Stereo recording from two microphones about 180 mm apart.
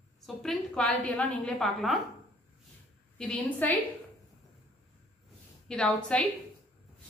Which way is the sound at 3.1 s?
5° left (ahead or behind).